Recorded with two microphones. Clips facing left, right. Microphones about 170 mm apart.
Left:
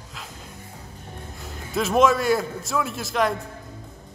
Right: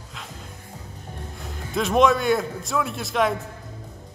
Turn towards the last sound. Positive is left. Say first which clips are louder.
# right 1 dB
turn(degrees=0)  # may be behind; listen again after turning